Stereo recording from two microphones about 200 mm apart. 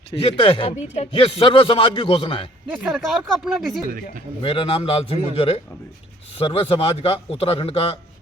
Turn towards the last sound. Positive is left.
turn(degrees=30)  # may be behind; listen again after turning